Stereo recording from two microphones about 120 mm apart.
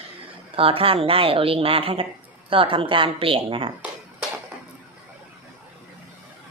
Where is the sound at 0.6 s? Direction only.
50° right (ahead or behind).